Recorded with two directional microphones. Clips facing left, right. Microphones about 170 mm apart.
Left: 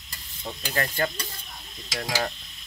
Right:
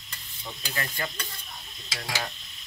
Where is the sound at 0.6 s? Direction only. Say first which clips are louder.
Left 7 dB; 45° left (ahead or behind).